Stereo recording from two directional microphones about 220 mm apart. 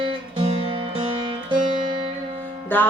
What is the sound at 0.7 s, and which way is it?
Music, 20° right (ahead or behind).